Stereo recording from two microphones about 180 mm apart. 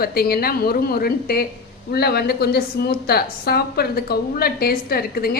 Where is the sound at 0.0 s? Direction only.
55° left (ahead or behind).